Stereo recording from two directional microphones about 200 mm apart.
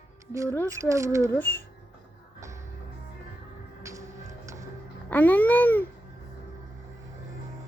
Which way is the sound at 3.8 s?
15° right (ahead or behind).